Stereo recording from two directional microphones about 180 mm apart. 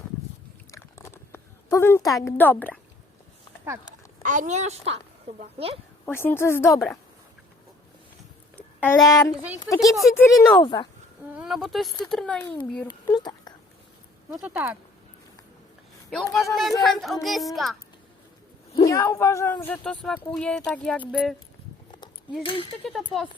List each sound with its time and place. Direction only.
0.7 s a sound: 15° left (ahead or behind)
4.2 s a woman's voice: 45° right (ahead or behind)
6.1 s speech: 10° left (ahead or behind)
8.5 s a sound: 10° left (ahead or behind)
9.0 s speech: 20° left (ahead or behind)
9.7 s speech: centre (ahead or behind)
10.3 s speech: 20° left (ahead or behind)
11.3 s speech: centre (ahead or behind)
12.9 s a sound: 25° left (ahead or behind)
14.3 s speech: 10° right (ahead or behind)
16.0 s speech: centre (ahead or behind)
18.9 s speech: 15° left (ahead or behind); by 21.3 s 5° right (ahead or behind)
22.4 s speech: 30° left (ahead or behind)
22.8 s speech: centre (ahead or behind)